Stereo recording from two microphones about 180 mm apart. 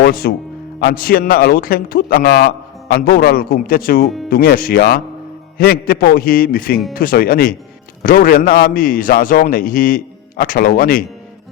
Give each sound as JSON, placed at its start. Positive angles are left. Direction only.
{"t": 0.0, "sound": "a man's voice", "side_deg": 55}